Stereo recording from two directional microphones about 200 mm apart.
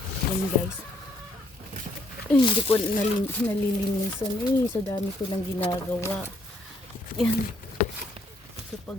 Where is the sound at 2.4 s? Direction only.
25° left (ahead or behind).